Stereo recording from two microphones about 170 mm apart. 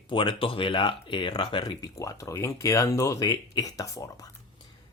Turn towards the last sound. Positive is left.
turn(degrees=20)  # may be behind; listen again after turning